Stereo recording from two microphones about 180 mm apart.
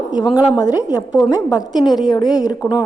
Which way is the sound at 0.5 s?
20° left (ahead or behind).